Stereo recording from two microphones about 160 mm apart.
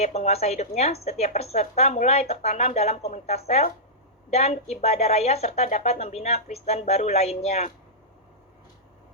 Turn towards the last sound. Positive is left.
turn(degrees=40)  # may be behind; listen again after turning